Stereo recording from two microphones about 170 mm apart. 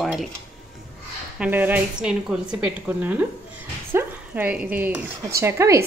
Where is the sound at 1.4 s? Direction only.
10° right (ahead or behind).